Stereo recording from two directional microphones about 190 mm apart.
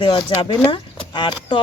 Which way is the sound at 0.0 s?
25° left (ahead or behind).